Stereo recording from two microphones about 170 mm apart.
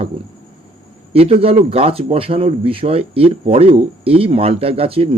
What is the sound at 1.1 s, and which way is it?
A man's voice, 35° right (ahead or behind).